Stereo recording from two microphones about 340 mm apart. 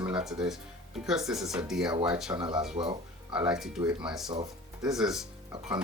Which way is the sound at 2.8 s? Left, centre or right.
Centre.